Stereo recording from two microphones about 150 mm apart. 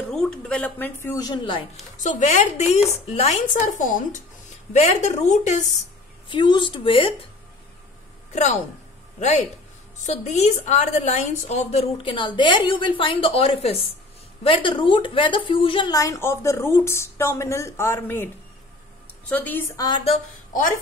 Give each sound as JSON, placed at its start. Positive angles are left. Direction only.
{"t": 0.1, "sound": "a woman's voice", "side_deg": 5}
{"t": 2.0, "sound": "speech", "side_deg": 50}
{"t": 4.7, "sound": "speech", "side_deg": 50}
{"t": 6.2, "sound": "a woman's voice", "side_deg": 35}
{"t": 8.3, "sound": "a woman's voice", "side_deg": 50}
{"t": 10.0, "sound": "a woman's voice", "side_deg": 50}